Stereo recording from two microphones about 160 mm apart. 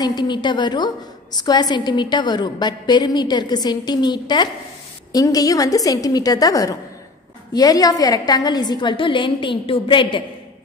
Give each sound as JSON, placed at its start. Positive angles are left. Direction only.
{"t": 0.0, "sound": "a woman's voice", "side_deg": 25}